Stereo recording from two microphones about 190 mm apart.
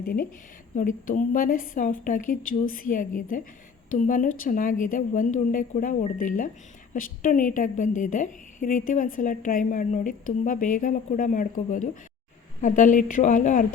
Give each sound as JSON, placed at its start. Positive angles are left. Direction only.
{"t": 0.8, "sound": "a woman's voice", "side_deg": 45}